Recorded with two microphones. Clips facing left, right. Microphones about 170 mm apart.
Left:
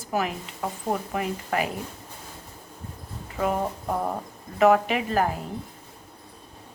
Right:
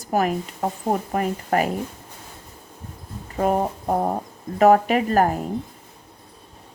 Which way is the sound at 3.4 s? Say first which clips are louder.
Right 5 dB; 45° right (ahead or behind).